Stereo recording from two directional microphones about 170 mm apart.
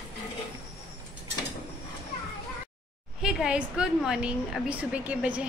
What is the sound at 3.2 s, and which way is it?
A woman's voice, 5° right (ahead or behind).